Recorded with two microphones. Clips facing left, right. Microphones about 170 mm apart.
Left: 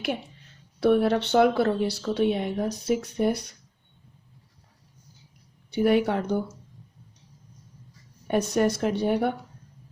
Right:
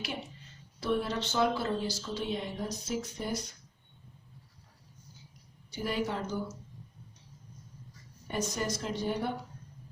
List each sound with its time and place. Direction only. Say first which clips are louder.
0.8 s speech: left 10 dB; 65° left (ahead or behind)
5.7 s speech: left 11 dB; 65° left (ahead or behind)
8.3 s speech: left 10 dB; 65° left (ahead or behind)